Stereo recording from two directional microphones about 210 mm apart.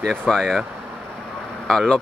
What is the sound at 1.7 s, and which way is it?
Speech, centre (ahead or behind).